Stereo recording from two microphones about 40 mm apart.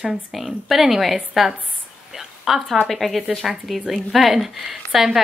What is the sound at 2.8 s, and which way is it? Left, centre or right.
A woman's voice, centre.